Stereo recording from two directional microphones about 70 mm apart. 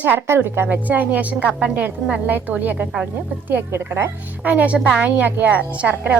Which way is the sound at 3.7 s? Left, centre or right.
Right.